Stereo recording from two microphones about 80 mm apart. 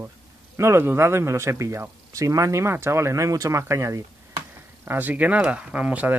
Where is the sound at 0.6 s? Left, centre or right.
Right.